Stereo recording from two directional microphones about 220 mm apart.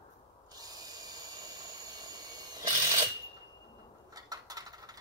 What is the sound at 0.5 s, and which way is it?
Drill, 15° right (ahead or behind).